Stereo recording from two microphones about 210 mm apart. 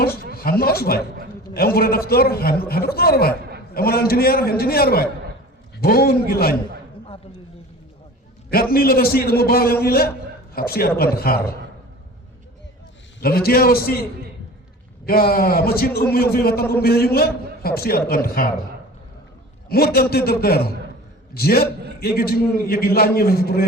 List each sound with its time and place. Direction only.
0.3 s a man's voice: 45° left (ahead or behind)
8.4 s a man's voice: 45° left (ahead or behind)
13.2 s a man's voice: 45° left (ahead or behind)
15.0 s a man's voice: 45° left (ahead or behind)
19.6 s a man's voice: 45° left (ahead or behind)